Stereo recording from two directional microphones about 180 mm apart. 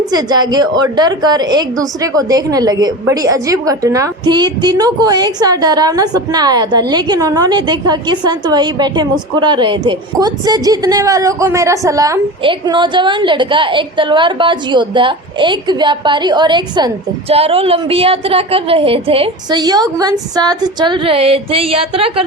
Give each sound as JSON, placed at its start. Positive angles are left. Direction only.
{"t": 0.1, "sound": "a woman's voice", "side_deg": -20}